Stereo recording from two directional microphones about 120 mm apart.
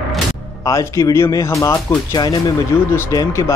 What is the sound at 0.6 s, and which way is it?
Speech, 25° left (ahead or behind).